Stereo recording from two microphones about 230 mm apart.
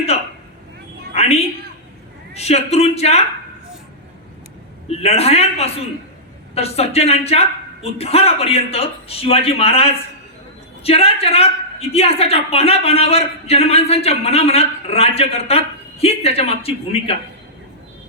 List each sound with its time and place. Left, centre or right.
1.1 s a sound: left
2.3 s a woman's voice: left
4.9 s a woman's voice: left